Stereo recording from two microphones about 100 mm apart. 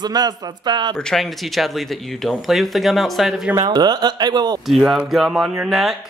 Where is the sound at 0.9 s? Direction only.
5° left (ahead or behind).